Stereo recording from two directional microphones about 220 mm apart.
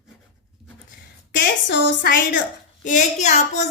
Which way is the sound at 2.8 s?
35° left (ahead or behind).